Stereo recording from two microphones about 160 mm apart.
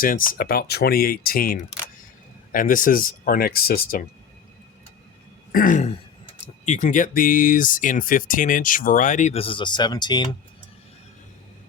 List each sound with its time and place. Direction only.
0.0 s speech: 60° left (ahead or behind)
5.5 s throat clearing: 60° left (ahead or behind)
6.4 s speech: 50° left (ahead or behind); by 10.2 s 25° left (ahead or behind)